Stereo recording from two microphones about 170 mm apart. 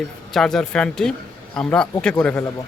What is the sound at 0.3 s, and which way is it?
A man's voice, 5° left (ahead or behind).